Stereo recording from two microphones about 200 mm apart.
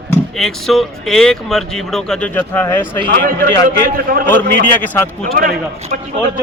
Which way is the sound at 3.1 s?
45° right (ahead or behind).